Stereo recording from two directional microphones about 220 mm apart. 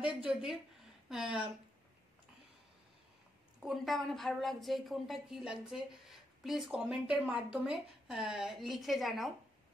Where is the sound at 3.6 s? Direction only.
Centre (ahead or behind).